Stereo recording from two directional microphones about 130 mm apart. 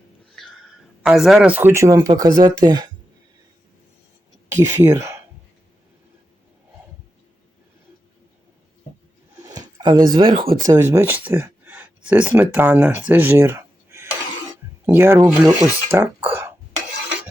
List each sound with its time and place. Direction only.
0.4 s a sound: 5° left (ahead or behind)
1.0 s speech: 5° right (ahead or behind); by 2.9 s 35° right (ahead or behind)
4.6 s speech: 15° right (ahead or behind)
9.6 s a sound: 30° right (ahead or behind)
10.1 s speech: 35° right (ahead or behind)
10.4 s speech: 90° right
10.7 s speech: 20° right (ahead or behind)